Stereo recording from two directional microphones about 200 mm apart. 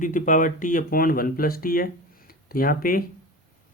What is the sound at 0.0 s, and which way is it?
Speech, 40° left (ahead or behind).